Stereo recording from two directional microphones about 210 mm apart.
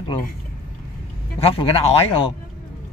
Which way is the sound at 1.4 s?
25° left (ahead or behind).